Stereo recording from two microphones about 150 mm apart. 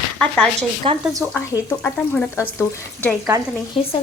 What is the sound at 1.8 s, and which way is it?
Speech, 15° left (ahead or behind).